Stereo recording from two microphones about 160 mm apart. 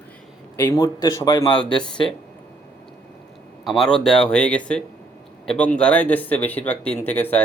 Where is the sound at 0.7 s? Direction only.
25° left (ahead or behind).